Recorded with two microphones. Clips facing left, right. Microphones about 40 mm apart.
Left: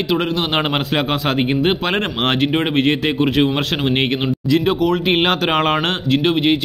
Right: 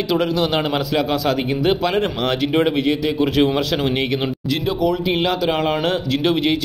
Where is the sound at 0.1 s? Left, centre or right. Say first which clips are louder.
Even; left.